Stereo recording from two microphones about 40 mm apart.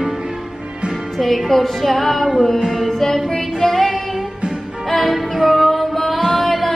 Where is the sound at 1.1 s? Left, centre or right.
Centre.